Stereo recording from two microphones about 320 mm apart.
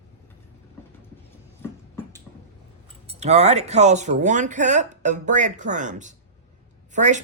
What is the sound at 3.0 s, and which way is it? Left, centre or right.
Speech, right.